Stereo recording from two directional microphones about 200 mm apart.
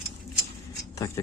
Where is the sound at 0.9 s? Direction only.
15° left (ahead or behind).